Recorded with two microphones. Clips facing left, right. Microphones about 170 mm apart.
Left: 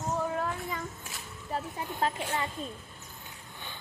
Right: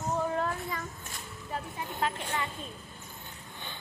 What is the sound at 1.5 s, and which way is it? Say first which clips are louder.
Speech: left 2 dB; 35° left (ahead or behind).